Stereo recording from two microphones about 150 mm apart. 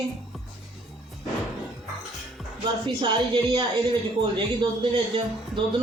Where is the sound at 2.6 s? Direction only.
35° right (ahead or behind).